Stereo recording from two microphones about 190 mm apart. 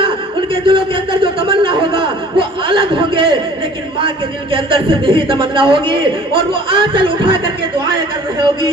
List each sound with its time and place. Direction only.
0.5 s a man's voice: 25° right (ahead or behind)
4.5 s a man's voice: 25° right (ahead or behind)